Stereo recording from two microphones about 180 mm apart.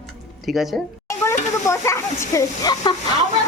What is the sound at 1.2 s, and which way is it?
Speech, 15° left (ahead or behind).